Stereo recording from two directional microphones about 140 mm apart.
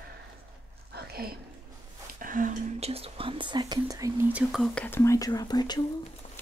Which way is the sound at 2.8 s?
45° right (ahead or behind).